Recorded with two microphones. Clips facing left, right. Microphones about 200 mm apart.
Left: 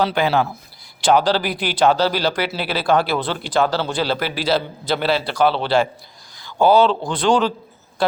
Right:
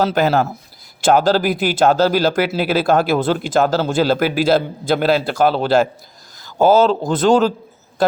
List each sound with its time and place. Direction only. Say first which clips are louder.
0.0 s speech: right 3 dB; 45° right (ahead or behind)